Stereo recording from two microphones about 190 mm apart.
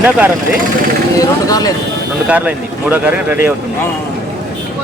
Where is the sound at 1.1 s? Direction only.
20° left (ahead or behind).